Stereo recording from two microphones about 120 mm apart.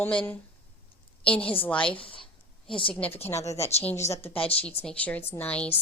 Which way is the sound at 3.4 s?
25° left (ahead or behind).